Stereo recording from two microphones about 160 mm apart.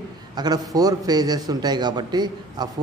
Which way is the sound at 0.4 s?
25° right (ahead or behind).